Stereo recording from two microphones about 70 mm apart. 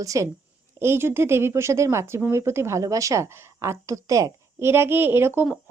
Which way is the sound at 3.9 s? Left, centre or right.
Right.